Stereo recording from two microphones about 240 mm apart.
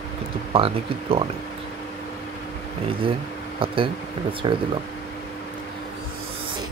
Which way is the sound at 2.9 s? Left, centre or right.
Right.